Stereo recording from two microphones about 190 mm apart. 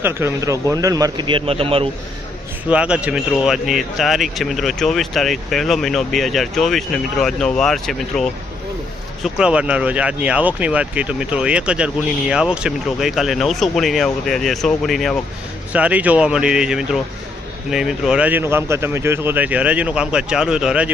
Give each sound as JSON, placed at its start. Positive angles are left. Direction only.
{"t": 0.0, "sound": "a man's voice", "side_deg": -15}
{"t": 2.6, "sound": "speech", "side_deg": -5}